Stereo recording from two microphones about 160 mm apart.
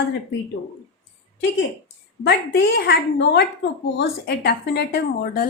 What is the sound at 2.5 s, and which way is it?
A woman's voice, 90° left.